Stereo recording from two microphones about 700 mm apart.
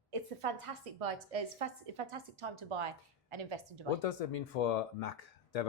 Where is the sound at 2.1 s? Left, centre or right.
Right.